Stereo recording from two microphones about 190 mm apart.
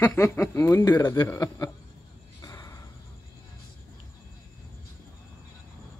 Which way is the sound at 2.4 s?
20° left (ahead or behind).